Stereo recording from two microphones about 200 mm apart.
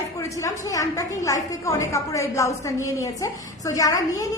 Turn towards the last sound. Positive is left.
turn(degrees=15)  # may be behind; listen again after turning